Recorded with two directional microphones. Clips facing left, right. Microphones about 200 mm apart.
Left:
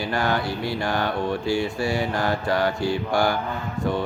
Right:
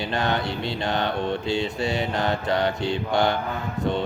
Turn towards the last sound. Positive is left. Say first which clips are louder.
# left 1 dB
turn(degrees=-20)  # may be behind; listen again after turning